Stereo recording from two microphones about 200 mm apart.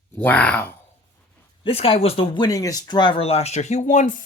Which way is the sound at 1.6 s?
30° left (ahead or behind).